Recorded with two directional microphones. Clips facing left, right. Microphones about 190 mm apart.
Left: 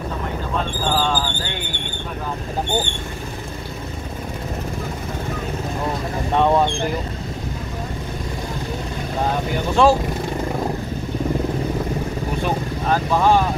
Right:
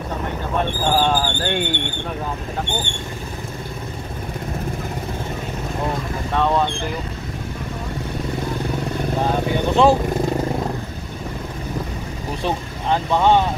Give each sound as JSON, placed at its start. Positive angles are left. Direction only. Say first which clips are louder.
{"t": 0.9, "sound": "speech", "louder": "right 3 dB", "side_deg": -45}
{"t": 6.3, "sound": "speech", "louder": "left 2 dB", "side_deg": 15}
{"t": 9.7, "sound": "speech", "louder": "even", "side_deg": -20}
{"t": 12.4, "sound": "speech", "louder": "right 1 dB", "side_deg": -20}